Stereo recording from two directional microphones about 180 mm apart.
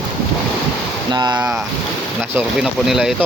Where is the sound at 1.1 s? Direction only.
25° right (ahead or behind).